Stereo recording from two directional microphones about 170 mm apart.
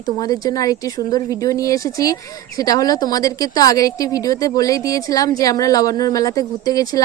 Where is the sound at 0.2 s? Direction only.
20° left (ahead or behind).